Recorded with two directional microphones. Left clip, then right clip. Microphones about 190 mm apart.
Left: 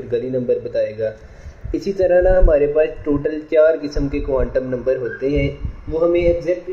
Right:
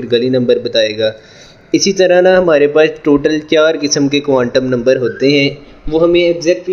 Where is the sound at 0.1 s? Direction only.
40° right (ahead or behind).